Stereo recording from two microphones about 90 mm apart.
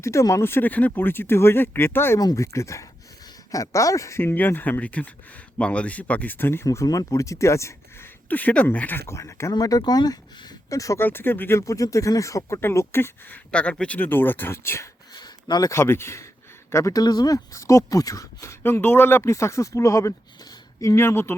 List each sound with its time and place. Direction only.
0.0 s speech: 35° left (ahead or behind)
2.1 s speech: 35° left (ahead or behind)
6.7 s speech: 40° left (ahead or behind)
8.3 s speech: 20° left (ahead or behind)
9.5 s speech: 45° left (ahead or behind)
10.7 s speech: 40° left (ahead or behind)
11.0 s speech: 25° left (ahead or behind)
15.1 s a sound: 50° left (ahead or behind)
15.7 s speech: 30° left (ahead or behind)